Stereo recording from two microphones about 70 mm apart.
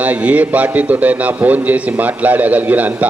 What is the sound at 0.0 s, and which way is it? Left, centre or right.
A man's voice, right.